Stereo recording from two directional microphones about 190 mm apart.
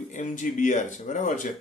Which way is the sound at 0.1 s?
40° left (ahead or behind).